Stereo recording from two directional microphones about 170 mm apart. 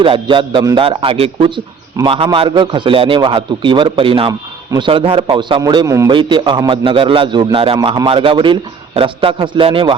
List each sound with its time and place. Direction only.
0.0 s a man's voice: 30° right (ahead or behind)